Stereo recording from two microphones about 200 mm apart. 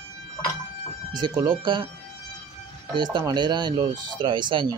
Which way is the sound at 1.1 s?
20° right (ahead or behind).